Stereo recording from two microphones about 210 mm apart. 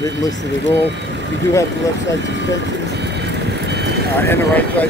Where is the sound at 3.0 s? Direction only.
55° right (ahead or behind).